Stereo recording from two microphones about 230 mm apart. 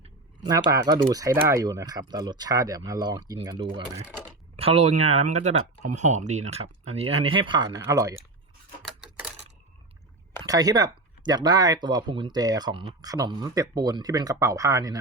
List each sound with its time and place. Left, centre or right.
0.4 s speech: centre
8.8 s rub: centre
10.4 s speech: centre